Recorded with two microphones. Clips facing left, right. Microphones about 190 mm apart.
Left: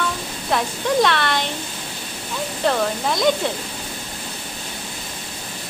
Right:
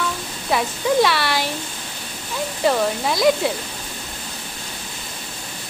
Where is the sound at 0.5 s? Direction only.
5° right (ahead or behind).